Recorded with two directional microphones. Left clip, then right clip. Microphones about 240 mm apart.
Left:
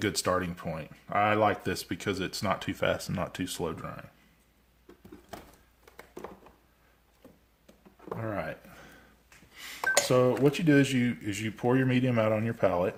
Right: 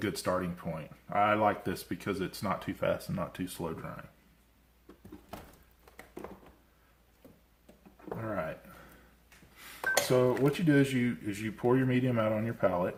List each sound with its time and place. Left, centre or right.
0.0 s speech: left
8.2 s a sound: left
10.2 s speech: left